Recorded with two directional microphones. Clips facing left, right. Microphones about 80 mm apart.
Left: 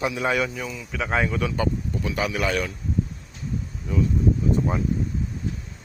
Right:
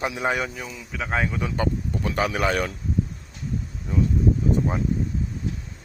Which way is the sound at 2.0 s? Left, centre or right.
Right.